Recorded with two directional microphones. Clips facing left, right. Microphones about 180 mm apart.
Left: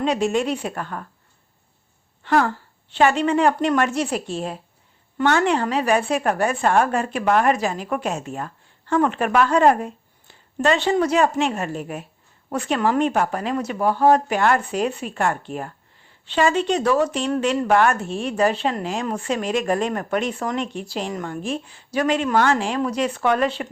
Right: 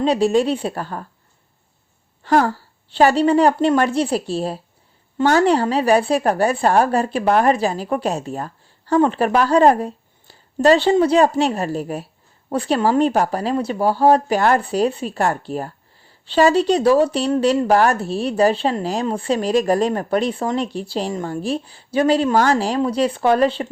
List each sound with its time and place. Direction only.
0.0 s a woman's voice: 35° right (ahead or behind)
2.2 s a woman's voice: 40° right (ahead or behind)